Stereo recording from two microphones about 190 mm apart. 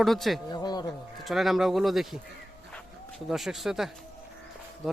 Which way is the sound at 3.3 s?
Centre (ahead or behind).